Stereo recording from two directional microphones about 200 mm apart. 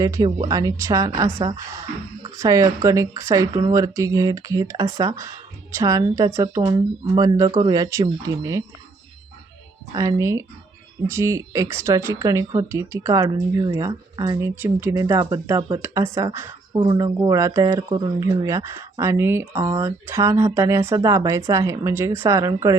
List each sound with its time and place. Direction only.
0.0 s speech: 15° right (ahead or behind)
9.9 s speech: 15° right (ahead or behind)
16.7 s speech: 25° right (ahead or behind)